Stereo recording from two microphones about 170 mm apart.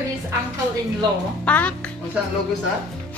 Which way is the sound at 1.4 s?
10° left (ahead or behind).